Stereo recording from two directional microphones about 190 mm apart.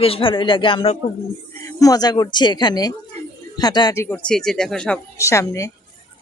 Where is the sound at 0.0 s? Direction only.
30° left (ahead or behind); by 5.2 s 5° left (ahead or behind).